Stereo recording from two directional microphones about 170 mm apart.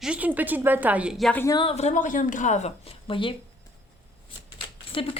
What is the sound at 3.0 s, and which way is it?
Speech, 30° left (ahead or behind).